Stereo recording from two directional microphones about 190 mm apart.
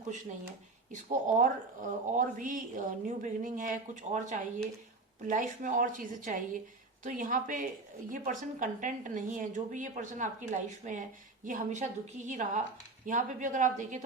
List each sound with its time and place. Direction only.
0.9 s a woman's voice: 40° right (ahead or behind)